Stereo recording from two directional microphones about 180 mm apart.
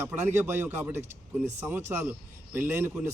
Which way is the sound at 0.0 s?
10° right (ahead or behind).